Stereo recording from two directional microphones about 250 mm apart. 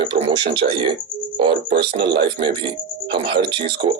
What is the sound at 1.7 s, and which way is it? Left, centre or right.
Speech, right.